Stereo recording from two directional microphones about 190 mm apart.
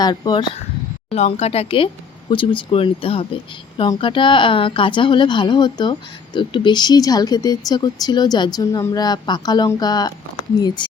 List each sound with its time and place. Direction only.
0.0 s speech: 25° left (ahead or behind)
1.1 s speech: 35° left (ahead or behind)